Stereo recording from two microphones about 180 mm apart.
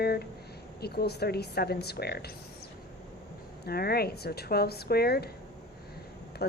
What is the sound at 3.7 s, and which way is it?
A woman's voice, 60° left (ahead or behind).